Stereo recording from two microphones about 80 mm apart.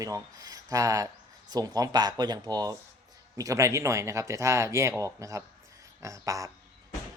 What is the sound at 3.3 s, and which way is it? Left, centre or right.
Speech, right.